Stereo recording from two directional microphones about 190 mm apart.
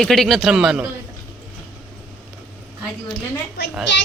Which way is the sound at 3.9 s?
70° left (ahead or behind).